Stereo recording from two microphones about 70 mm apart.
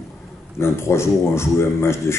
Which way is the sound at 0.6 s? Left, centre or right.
Left.